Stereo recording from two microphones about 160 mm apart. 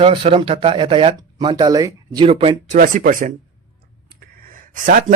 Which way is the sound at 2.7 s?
55° right (ahead or behind).